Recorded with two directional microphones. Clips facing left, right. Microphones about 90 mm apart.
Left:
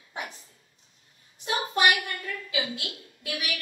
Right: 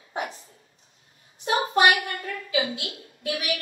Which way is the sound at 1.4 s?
35° right (ahead or behind).